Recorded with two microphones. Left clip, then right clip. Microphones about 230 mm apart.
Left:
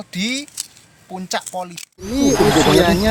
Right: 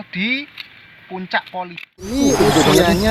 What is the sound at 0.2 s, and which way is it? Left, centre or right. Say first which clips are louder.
Speech: right 3 dB; left.